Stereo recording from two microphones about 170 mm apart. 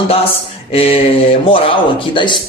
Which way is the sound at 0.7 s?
35° left (ahead or behind).